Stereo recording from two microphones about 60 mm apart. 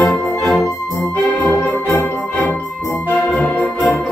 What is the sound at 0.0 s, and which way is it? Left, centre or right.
Music, centre.